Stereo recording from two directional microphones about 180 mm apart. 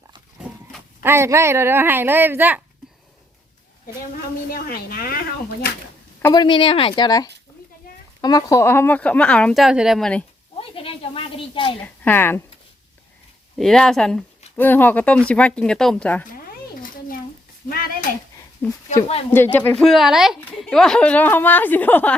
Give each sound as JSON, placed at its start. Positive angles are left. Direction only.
{"t": 1.0, "sound": "speech", "side_deg": -15}
{"t": 4.5, "sound": "a woman's voice", "side_deg": 55}
{"t": 6.2, "sound": "speech", "side_deg": 25}
{"t": 10.6, "sound": "a sound", "side_deg": 30}
{"t": 11.8, "sound": "a child's voice", "side_deg": 10}
{"t": 13.6, "sound": "speech", "side_deg": 0}
{"t": 17.7, "sound": "speech", "side_deg": 55}
{"t": 18.6, "sound": "speech", "side_deg": 10}